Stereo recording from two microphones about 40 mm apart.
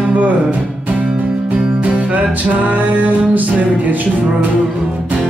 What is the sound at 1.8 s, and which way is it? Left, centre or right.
Music, right.